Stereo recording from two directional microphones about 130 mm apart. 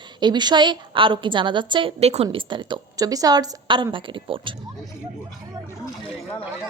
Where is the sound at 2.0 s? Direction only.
55° right (ahead or behind); by 4.5 s 40° right (ahead or behind).